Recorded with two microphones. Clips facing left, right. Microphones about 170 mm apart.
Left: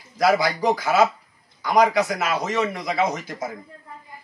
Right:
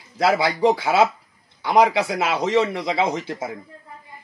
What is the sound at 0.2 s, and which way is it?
Speech, 25° right (ahead or behind).